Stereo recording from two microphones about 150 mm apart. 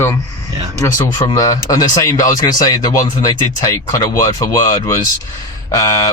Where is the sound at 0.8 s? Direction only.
20° left (ahead or behind).